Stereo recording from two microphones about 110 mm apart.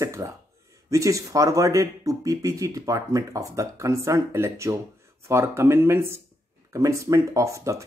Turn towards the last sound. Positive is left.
turn(degrees=-30)  # may be behind; listen again after turning